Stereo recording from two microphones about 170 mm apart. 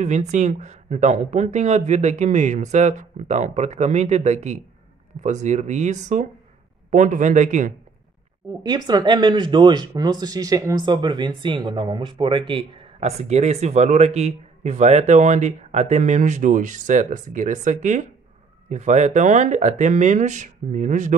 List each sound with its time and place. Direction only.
0.0 s speech: 45° right (ahead or behind)
8.5 s speech: 25° right (ahead or behind); by 21.2 s 45° right (ahead or behind)